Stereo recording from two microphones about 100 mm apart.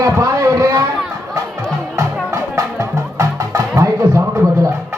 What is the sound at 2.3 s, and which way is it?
Music, 30° right (ahead or behind).